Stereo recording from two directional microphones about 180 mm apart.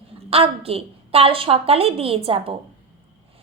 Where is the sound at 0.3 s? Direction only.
35° right (ahead or behind).